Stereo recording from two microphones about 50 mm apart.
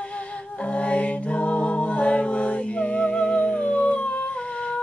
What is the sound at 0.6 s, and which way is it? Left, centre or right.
Music, left.